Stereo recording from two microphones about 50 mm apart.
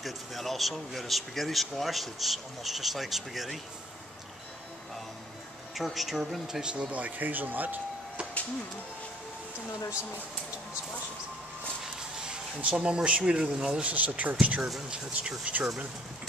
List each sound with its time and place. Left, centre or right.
0.0 s speech: centre
5.8 s speech: centre
6.7 s speech: right
12.6 s speech: right
13.8 s speech: right
14.6 s speech: centre